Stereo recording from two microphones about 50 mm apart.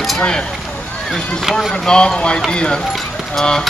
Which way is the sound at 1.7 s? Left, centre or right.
Centre.